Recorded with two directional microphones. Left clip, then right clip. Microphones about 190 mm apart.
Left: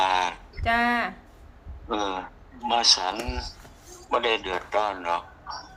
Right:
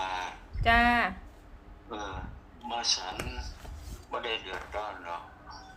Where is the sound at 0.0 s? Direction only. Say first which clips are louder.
Left 11 dB; 55° left (ahead or behind).